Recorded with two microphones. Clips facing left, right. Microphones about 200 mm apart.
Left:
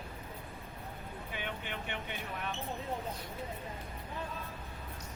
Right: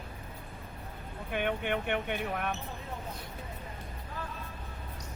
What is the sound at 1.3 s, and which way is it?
A man's voice, 60° right (ahead or behind).